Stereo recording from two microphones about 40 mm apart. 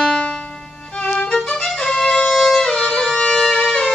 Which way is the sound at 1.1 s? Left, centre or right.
Centre.